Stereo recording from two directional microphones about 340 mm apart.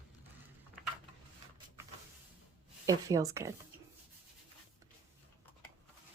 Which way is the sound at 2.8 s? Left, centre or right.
Centre.